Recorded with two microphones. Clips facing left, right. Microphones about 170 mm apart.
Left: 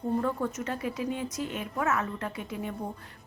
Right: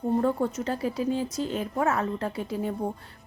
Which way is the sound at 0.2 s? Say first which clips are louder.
Right 5 dB; 30° right (ahead or behind).